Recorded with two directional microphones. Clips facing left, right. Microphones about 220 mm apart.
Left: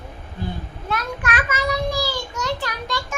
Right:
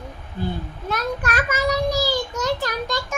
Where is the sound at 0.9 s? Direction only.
40° right (ahead or behind).